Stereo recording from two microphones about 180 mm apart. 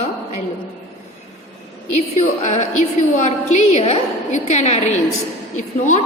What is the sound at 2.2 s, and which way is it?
A woman's voice, 40° left (ahead or behind).